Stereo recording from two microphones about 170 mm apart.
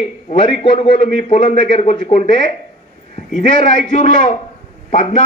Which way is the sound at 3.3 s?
50° left (ahead or behind).